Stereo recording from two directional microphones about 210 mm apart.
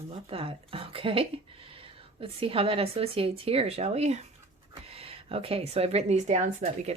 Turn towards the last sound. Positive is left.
turn(degrees=-30)  # may be behind; listen again after turning